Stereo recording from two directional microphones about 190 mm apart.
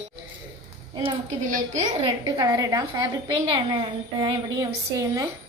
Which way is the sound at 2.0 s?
25° right (ahead or behind).